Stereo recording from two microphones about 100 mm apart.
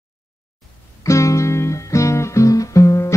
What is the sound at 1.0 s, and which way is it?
Music, 30° left (ahead or behind).